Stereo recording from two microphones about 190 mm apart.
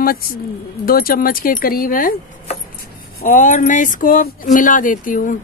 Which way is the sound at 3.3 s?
40° left (ahead or behind).